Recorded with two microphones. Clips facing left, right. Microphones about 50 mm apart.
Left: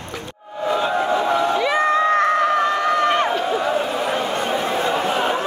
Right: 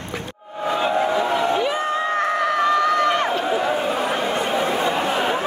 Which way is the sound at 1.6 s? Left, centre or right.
Left.